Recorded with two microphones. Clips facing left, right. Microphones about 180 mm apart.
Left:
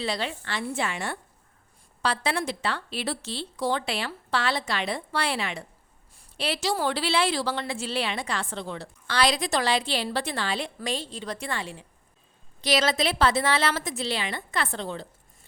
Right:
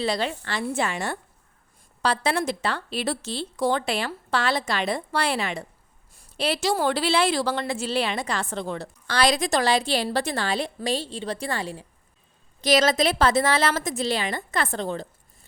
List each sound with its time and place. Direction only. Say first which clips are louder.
0.0 s a woman's voice: right 4 dB; 40° right (ahead or behind)